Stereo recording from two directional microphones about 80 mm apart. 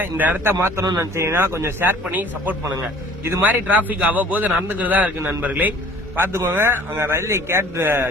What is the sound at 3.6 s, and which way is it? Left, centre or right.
A man's voice, centre.